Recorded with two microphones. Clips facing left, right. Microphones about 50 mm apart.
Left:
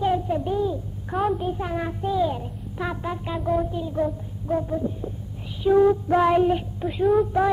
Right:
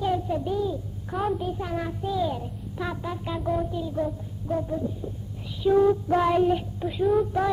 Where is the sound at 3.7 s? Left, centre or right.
Centre.